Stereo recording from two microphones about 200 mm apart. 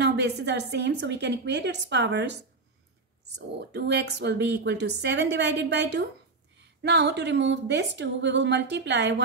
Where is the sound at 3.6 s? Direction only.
60° right (ahead or behind).